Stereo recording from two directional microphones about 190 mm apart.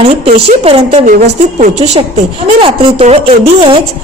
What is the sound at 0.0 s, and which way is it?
A woman's voice, 30° right (ahead or behind).